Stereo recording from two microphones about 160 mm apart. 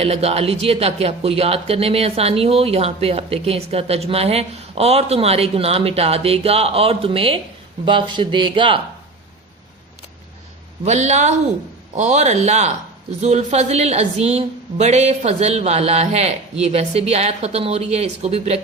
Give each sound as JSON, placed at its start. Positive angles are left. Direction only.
{"t": 0.0, "sound": "speech", "side_deg": -40}
{"t": 10.8, "sound": "a woman's voice", "side_deg": -45}